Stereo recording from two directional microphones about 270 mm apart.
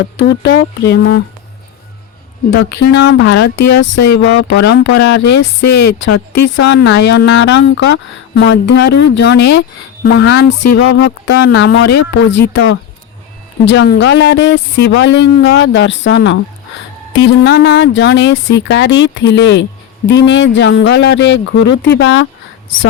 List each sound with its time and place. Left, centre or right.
0.2 s speech: left
2.8 s speech: left
3.6 s speech: left
3.9 s speech: left